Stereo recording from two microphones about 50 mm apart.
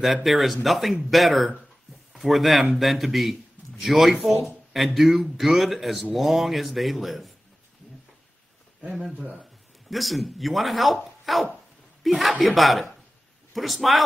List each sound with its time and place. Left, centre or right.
0.0 s a man's voice: centre
9.1 s speech: right
9.4 s a man's voice: centre